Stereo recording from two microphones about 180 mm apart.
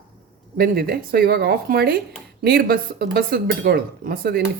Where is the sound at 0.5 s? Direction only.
55° right (ahead or behind).